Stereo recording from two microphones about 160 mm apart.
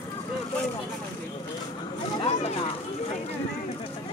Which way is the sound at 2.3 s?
40° left (ahead or behind).